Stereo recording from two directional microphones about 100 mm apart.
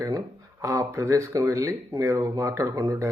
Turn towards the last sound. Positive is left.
turn(degrees=-35)  # may be behind; listen again after turning